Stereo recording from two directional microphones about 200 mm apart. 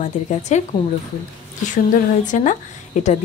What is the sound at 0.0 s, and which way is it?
Speech, 35° left (ahead or behind).